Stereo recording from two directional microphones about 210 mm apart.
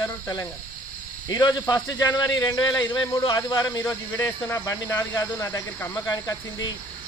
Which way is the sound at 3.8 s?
10° left (ahead or behind).